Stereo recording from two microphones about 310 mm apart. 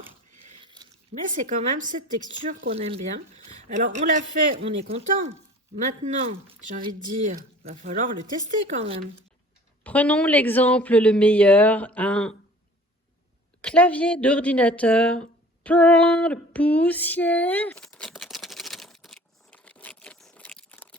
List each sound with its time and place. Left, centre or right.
0.4 s biting: centre
1.2 s speech: right
4.9 s speech: right
9.8 s speech: centre
13.6 s a sound: centre